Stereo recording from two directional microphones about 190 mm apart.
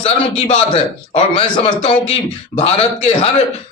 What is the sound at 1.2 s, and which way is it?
A man's voice, 30° left (ahead or behind).